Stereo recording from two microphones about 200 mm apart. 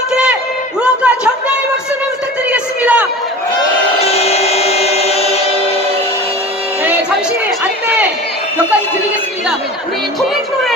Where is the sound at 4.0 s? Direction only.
30° left (ahead or behind).